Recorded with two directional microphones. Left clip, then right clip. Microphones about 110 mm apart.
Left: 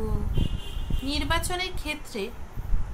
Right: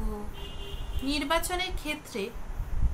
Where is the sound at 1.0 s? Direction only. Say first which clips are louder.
Even; 10° left (ahead or behind).